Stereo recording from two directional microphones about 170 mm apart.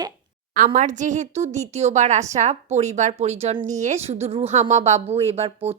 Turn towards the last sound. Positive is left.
turn(degrees=-35)  # may be behind; listen again after turning